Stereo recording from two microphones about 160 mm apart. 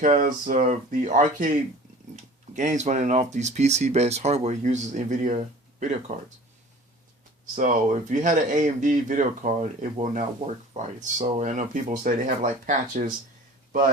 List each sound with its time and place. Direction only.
0.0 s speech: 55° right (ahead or behind)
7.5 s speech: 50° right (ahead or behind)